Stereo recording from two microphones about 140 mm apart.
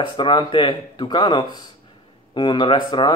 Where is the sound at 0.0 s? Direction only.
35° left (ahead or behind).